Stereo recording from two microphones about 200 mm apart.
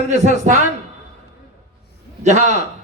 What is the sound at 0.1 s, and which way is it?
Speech, 35° right (ahead or behind).